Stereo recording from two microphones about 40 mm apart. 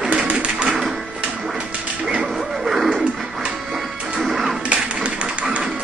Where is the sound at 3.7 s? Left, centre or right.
Centre.